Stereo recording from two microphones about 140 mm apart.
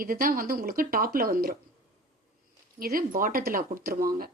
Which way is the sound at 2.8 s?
90° right.